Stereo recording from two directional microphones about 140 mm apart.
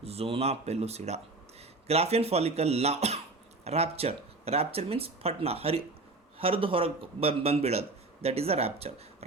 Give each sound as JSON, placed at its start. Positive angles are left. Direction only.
{"t": 0.0, "sound": "a man's voice", "side_deg": -45}